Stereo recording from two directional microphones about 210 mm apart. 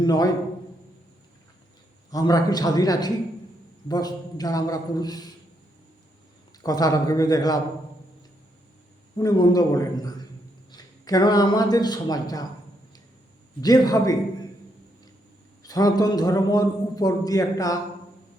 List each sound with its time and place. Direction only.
0.0 s a man's voice: 20° left (ahead or behind)
2.0 s a man's voice: 15° left (ahead or behind)
6.6 s a man's voice: 15° left (ahead or behind)
9.1 s a man's voice: 20° left (ahead or behind)
13.6 s a man's voice: 20° left (ahead or behind)
15.6 s a man's voice: 15° left (ahead or behind)